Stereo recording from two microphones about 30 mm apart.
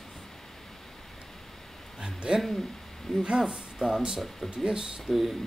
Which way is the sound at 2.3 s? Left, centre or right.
Centre.